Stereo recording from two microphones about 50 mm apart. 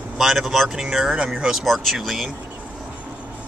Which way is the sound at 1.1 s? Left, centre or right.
Right.